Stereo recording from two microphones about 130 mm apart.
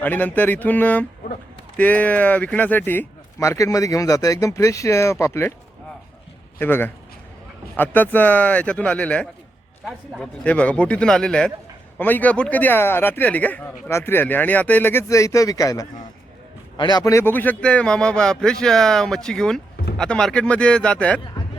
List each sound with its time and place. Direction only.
0.0 s a man's voice: 15° left (ahead or behind)
6.6 s a man's voice: 15° left (ahead or behind)